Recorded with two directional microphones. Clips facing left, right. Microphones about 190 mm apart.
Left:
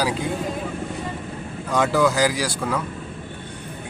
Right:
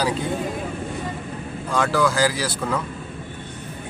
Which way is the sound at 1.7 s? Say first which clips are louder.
Left 2 dB; 20° left (ahead or behind).